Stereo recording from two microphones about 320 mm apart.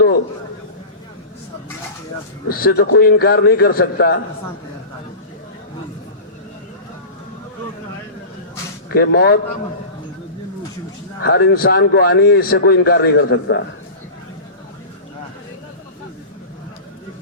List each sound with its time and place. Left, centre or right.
2.5 s a man's voice: left
8.9 s a man's voice: left
11.2 s a man's voice: left